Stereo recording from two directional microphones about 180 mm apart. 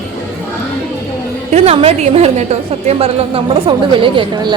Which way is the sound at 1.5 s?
35° right (ahead or behind).